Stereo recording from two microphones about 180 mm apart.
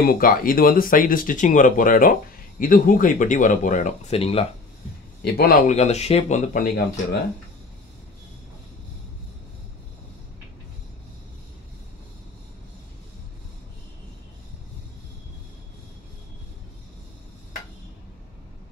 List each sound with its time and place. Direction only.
0.0 s speech: 50° left (ahead or behind); by 4.5 s 30° left (ahead or behind)
5.2 s a man's voice: 60° left (ahead or behind)
5.8 s speech: 35° left (ahead or behind)